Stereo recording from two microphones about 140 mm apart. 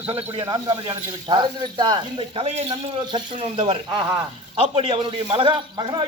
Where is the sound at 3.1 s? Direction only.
35° right (ahead or behind).